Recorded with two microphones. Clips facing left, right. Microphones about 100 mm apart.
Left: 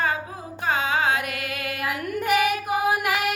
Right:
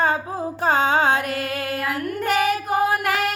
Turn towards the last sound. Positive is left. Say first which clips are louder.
# right 1 dB
turn(degrees=10)  # may be behind; listen again after turning